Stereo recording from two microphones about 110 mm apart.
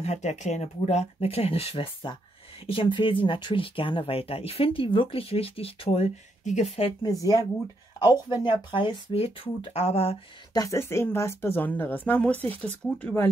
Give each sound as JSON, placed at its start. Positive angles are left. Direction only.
{"t": 0.0, "sound": "speech", "side_deg": 85}
{"t": 7.0, "sound": "speech", "side_deg": 35}
{"t": 8.1, "sound": "speech", "side_deg": 45}
{"t": 8.7, "sound": "speech", "side_deg": 55}
{"t": 10.5, "sound": "speech", "side_deg": 35}